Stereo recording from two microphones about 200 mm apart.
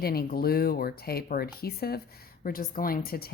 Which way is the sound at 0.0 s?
50° left (ahead or behind).